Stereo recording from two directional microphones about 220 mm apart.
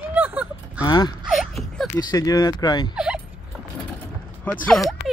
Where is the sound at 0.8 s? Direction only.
20° left (ahead or behind).